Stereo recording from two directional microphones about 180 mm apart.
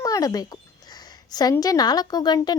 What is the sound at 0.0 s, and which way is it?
A woman's voice, 20° left (ahead or behind).